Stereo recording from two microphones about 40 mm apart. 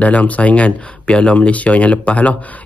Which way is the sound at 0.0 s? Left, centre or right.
Left.